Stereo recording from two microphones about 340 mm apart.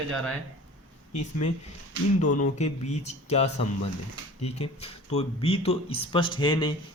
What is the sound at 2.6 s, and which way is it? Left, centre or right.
Speech, centre.